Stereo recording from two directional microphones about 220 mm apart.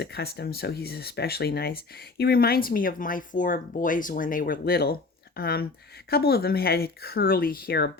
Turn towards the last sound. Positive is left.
turn(degrees=45)  # may be behind; listen again after turning